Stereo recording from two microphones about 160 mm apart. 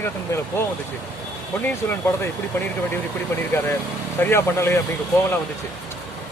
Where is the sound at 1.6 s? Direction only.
15° left (ahead or behind).